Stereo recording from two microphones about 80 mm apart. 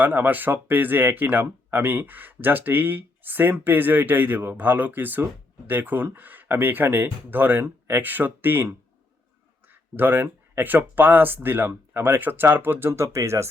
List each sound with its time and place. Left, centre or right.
0.0 s speech: right
9.9 s speech: right